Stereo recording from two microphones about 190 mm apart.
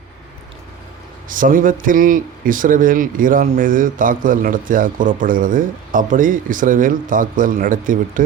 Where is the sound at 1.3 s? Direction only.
45° right (ahead or behind).